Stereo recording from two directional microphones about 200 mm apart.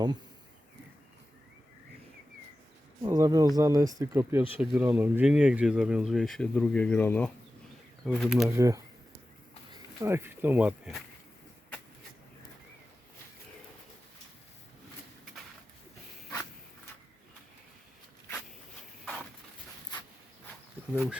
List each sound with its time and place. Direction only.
3.0 s speech: 20° right (ahead or behind); by 7.3 s 10° left (ahead or behind)
8.0 s speech: centre (ahead or behind)
8.4 s a sound: 15° right (ahead or behind)
10.0 s speech: 15° right (ahead or behind)
19.0 s a sound: centre (ahead or behind)
20.9 s speech: 5° right (ahead or behind)